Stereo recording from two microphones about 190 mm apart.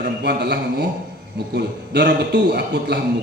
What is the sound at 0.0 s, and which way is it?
A man's voice, 60° right (ahead or behind).